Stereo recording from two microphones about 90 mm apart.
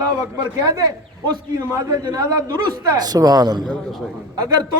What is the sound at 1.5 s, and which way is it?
A man's voice, 45° right (ahead or behind).